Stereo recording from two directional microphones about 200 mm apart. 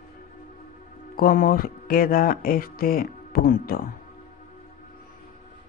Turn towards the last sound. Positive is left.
turn(degrees=45)  # may be behind; listen again after turning